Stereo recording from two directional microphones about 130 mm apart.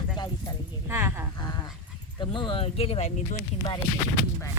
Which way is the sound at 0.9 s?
20° right (ahead or behind).